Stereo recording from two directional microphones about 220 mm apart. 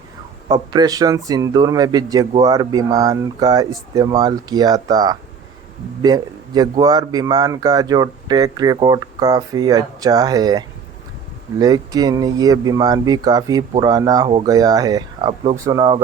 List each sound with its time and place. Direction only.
0.5 s speech: 15° right (ahead or behind)
11.6 s speech: 15° right (ahead or behind)